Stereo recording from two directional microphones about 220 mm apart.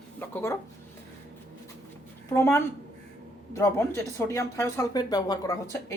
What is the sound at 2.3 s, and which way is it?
A woman's voice, 10° left (ahead or behind).